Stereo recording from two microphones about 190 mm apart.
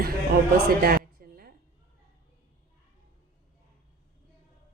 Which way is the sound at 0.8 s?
50° right (ahead or behind).